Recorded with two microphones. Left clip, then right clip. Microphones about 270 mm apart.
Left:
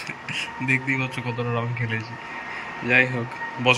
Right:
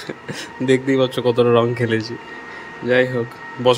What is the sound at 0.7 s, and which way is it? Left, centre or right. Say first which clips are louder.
A man's voice: right 8 dB; right.